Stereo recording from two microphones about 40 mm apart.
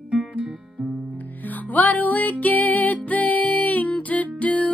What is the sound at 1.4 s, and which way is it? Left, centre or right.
Music, left.